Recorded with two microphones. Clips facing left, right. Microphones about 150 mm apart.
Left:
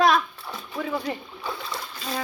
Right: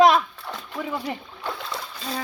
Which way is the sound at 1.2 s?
5° left (ahead or behind).